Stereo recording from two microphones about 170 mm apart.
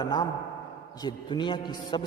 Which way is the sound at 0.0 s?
25° left (ahead or behind).